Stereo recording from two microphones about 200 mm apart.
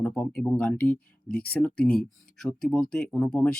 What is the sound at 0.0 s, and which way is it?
Speech, 5° left (ahead or behind).